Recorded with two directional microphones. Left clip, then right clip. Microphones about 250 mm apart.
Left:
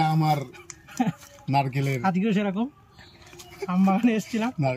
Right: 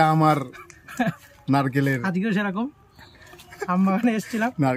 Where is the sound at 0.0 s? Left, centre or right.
Centre.